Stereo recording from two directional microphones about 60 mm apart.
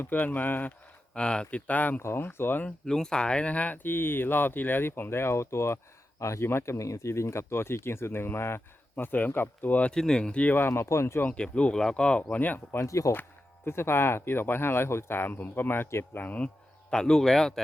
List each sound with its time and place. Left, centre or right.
0.0 s speech: left
1.1 s speech: centre
2.0 s speech: left
2.2 s speech: left
2.6 s speech: centre
3.8 s speech: left
9.1 s speech: left
9.9 s speech: centre
10.5 s speech: left
11.2 s speech: left
12.4 s speech: left
12.8 s speech: left
13.7 s speech: left
16.9 s speech: centre